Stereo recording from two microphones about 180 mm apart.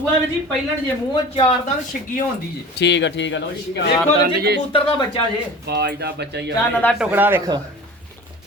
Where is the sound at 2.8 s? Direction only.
80° left.